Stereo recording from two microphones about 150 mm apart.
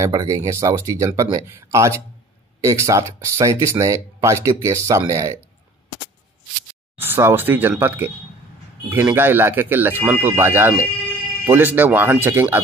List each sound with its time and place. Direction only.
0.0 s speech: 25° right (ahead or behind)
7.0 s speech: 15° right (ahead or behind)
8.9 s speech: 15° right (ahead or behind)